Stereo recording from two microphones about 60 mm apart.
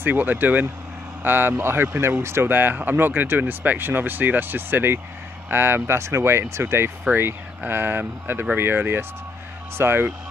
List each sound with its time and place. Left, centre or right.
0.0 s speech: right